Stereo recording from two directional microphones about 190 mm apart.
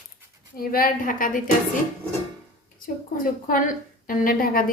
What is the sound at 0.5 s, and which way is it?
Speech, 50° left (ahead or behind).